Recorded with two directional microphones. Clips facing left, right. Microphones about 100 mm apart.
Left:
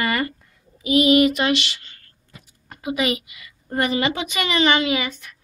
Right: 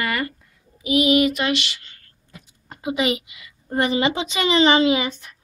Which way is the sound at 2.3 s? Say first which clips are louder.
Right 2 dB; 25° right (ahead or behind).